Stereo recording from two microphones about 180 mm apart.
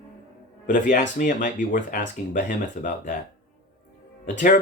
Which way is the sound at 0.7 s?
45° left (ahead or behind).